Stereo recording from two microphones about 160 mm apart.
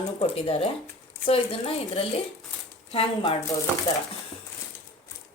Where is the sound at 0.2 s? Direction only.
40° left (ahead or behind).